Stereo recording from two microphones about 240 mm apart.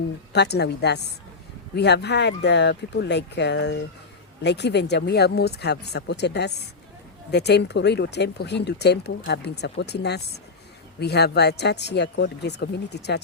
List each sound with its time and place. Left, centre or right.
0.3 s speech: left